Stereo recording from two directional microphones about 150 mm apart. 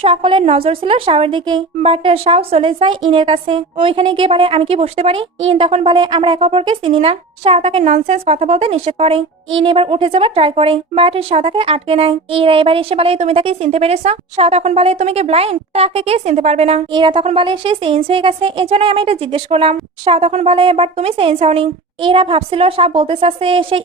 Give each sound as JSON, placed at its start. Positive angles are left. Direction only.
{"t": 0.0, "sound": "a woman's voice", "side_deg": -35}
{"t": 16.9, "sound": "a woman's voice", "side_deg": -35}